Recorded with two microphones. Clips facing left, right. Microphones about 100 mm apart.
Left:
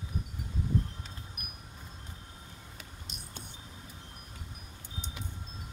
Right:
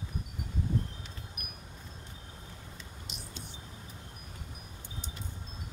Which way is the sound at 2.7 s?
55° left (ahead or behind).